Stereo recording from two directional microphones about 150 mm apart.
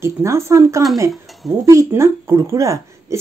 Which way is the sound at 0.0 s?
20° right (ahead or behind).